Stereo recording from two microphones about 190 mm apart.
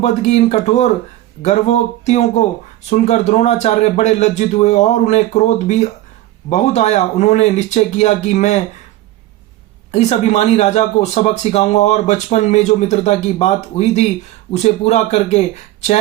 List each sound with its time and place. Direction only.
0.0 s speech: 35° left (ahead or behind)
9.9 s speech: 35° left (ahead or behind)